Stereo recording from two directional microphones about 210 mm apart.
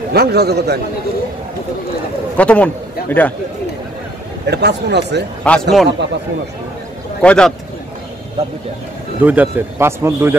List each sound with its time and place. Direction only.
0.1 s speech: 50° right (ahead or behind)
2.3 s a man's voice: 5° left (ahead or behind)
4.5 s speech: 55° right (ahead or behind)
5.4 s a man's voice: 5° left (ahead or behind)
7.2 s a man's voice: 5° left (ahead or behind)
9.2 s a man's voice: 10° right (ahead or behind)